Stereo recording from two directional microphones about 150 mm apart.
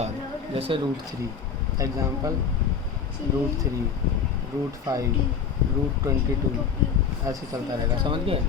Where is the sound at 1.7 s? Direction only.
20° right (ahead or behind).